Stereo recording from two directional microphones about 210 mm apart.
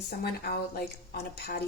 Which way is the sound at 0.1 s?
50° left (ahead or behind).